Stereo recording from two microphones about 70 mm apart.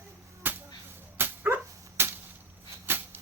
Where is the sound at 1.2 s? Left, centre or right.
Right.